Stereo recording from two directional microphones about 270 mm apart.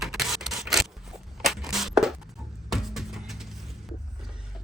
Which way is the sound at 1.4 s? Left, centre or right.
Centre.